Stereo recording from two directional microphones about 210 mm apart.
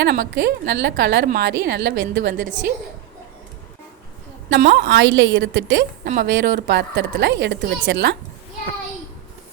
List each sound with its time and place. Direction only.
0.0 s a woman's voice: 55° right (ahead or behind)
2.3 s a woman's voice: 40° right (ahead or behind)
4.5 s a woman's voice: 55° right (ahead or behind)